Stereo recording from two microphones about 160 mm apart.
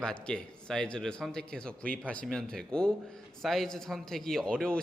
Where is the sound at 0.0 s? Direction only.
5° left (ahead or behind).